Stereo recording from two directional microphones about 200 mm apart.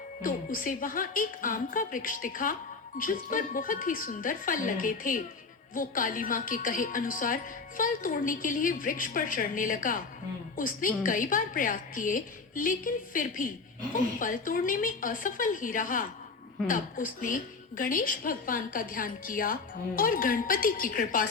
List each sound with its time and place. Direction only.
0.2 s a woman's voice: 45° left (ahead or behind)